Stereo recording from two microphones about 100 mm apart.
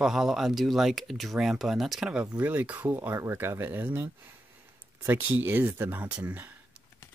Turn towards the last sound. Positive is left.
turn(degrees=-15)  # may be behind; listen again after turning